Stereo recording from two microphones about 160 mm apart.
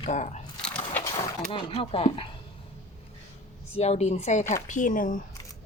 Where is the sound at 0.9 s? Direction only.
20° left (ahead or behind).